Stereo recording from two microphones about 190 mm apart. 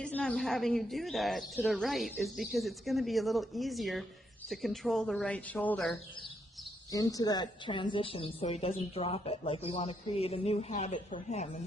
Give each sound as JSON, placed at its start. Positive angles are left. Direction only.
{"t": 0.0, "sound": "speech", "side_deg": 5}
{"t": 6.9, "sound": "a woman's voice", "side_deg": 20}